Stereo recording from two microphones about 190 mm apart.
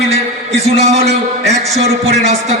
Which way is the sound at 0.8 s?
35° right (ahead or behind).